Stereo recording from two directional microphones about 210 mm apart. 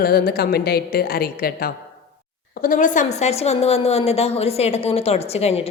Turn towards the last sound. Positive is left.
turn(degrees=30)  # may be behind; listen again after turning